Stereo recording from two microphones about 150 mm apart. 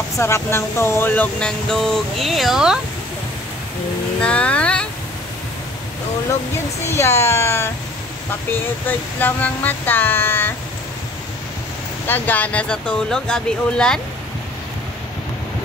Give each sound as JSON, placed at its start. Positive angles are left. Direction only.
{"t": 0.2, "sound": "speech", "side_deg": 15}
{"t": 4.2, "sound": "speech", "side_deg": 5}
{"t": 6.9, "sound": "a sound", "side_deg": 20}
{"t": 12.1, "sound": "speech", "side_deg": 10}